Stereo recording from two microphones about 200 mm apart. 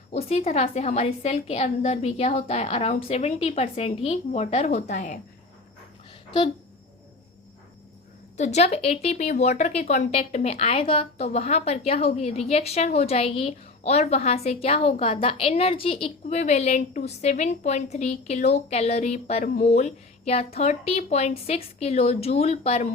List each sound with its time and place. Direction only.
0.1 s a woman's voice: 30° left (ahead or behind)
8.4 s a woman's voice: 35° left (ahead or behind)